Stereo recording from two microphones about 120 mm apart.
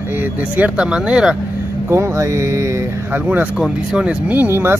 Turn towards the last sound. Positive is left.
turn(degrees=-20)  # may be behind; listen again after turning